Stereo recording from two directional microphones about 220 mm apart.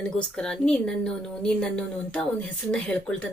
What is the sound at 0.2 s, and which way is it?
A woman's voice, 5° left (ahead or behind).